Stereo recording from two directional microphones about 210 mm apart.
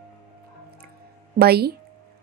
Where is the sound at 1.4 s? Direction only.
50° right (ahead or behind).